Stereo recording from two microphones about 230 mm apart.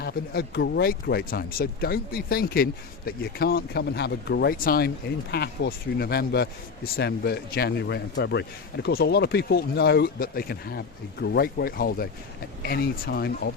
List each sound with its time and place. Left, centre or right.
0.0 s a man's voice: left